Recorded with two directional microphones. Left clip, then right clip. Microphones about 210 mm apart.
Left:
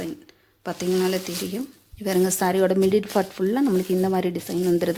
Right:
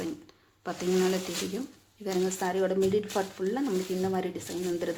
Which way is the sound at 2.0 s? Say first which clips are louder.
Left 8 dB; 45° left (ahead or behind).